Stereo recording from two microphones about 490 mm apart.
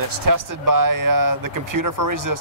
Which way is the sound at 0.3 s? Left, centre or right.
Right.